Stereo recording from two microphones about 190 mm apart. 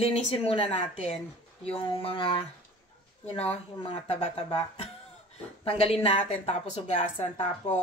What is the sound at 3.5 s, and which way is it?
Speech, 35° left (ahead or behind).